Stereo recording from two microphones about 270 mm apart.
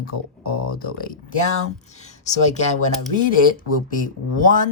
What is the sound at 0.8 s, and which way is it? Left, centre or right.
Speech, left.